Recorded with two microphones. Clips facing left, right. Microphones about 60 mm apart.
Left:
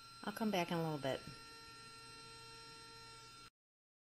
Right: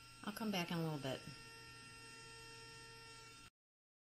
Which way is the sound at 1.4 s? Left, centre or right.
Right.